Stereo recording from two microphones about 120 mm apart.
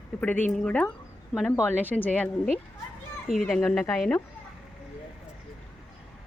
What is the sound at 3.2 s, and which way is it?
Speech, centre (ahead or behind).